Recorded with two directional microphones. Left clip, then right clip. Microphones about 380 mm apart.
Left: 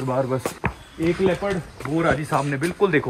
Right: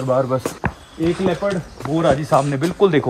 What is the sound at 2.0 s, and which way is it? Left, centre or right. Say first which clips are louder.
Speech: right 6 dB; right.